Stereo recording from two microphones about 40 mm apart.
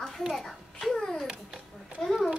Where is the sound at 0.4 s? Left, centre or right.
Centre.